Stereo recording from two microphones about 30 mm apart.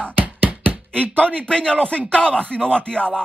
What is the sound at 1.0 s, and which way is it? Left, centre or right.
Speech, right.